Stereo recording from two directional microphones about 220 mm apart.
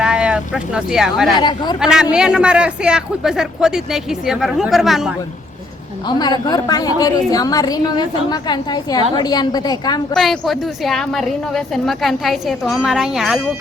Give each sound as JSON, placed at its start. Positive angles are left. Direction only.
{"t": 0.0, "sound": "speech", "side_deg": -5}
{"t": 1.4, "sound": "speech", "side_deg": 20}
{"t": 1.8, "sound": "a woman's voice", "side_deg": -5}
{"t": 6.1, "sound": "a woman's voice", "side_deg": 20}
{"t": 10.2, "sound": "a woman's voice", "side_deg": 0}